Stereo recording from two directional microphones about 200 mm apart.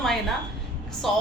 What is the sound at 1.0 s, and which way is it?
Speech, centre (ahead or behind).